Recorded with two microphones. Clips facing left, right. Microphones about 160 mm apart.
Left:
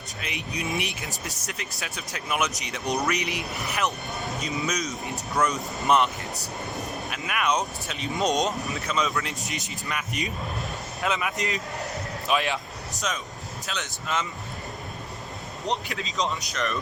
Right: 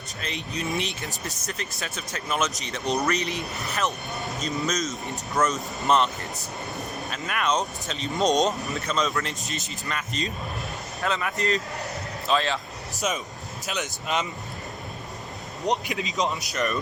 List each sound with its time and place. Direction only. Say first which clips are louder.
0.2 s speech: right 1 dB; 10° left (ahead or behind)
5.4 s speech: right 1 dB; 5° right (ahead or behind)
5.9 s speech: even; 10° left (ahead or behind)
9.5 s speech: even; 15° left (ahead or behind)
13.7 s speech: right 3 dB; 15° right (ahead or behind)
15.6 s speech: right 4 dB; 15° right (ahead or behind)